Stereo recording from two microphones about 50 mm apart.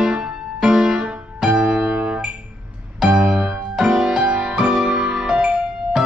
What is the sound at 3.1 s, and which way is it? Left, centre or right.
Music, right.